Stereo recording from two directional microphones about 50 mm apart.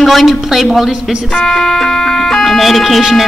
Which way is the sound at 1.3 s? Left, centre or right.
Centre.